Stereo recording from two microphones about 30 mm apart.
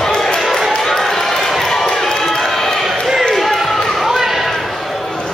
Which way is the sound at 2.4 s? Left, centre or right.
Centre.